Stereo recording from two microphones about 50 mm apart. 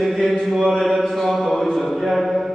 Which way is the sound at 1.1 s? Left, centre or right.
Centre.